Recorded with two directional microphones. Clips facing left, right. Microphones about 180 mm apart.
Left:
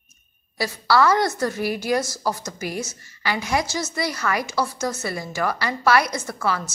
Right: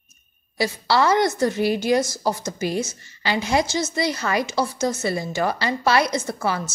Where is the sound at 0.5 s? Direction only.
20° right (ahead or behind).